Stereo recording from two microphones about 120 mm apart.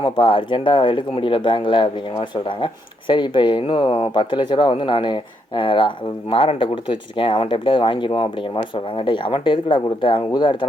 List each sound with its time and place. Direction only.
0.0 s speech: 45° left (ahead or behind)